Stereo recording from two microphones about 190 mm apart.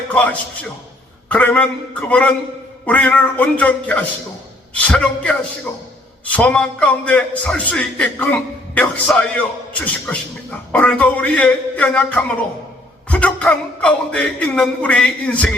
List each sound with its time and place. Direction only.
0.1 s a man's voice: 5° left (ahead or behind)